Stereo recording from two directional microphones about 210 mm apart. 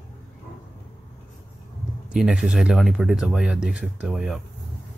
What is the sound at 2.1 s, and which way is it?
Speech, 5° right (ahead or behind).